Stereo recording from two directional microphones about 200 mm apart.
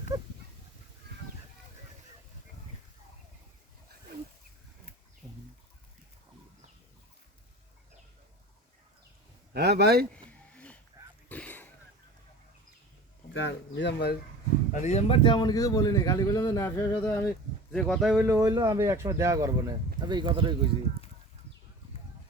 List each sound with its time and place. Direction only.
0.1 s a sound: 20° right (ahead or behind)
9.5 s a man's voice: 55° right (ahead or behind)
10.2 s a sound: 5° left (ahead or behind)
13.3 s speech: 65° left (ahead or behind)
14.7 s a man's voice: 35° left (ahead or behind); by 17.3 s 15° left (ahead or behind)
17.7 s speech: 5° left (ahead or behind)
18.3 s speech: 20° right (ahead or behind)